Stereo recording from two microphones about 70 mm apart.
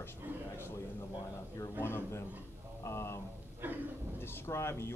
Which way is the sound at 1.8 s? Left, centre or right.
Left.